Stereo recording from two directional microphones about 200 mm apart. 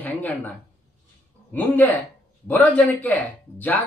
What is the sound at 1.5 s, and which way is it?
Speech, 10° left (ahead or behind).